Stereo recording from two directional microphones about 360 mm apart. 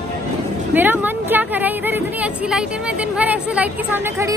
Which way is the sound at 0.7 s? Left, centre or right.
Centre.